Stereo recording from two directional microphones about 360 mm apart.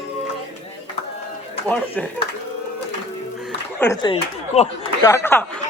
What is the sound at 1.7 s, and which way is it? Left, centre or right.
Mantra, centre.